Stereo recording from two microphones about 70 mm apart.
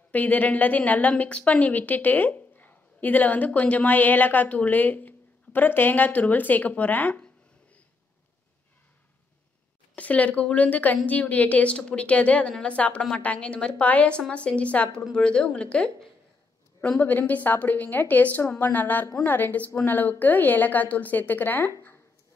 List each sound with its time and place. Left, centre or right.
0.1 s a woman's voice: left
9.9 s a woman's voice: centre
17.0 s a woman's voice: left